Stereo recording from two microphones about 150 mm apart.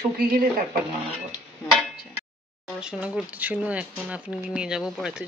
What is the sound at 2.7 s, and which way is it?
Speech, 5° right (ahead or behind).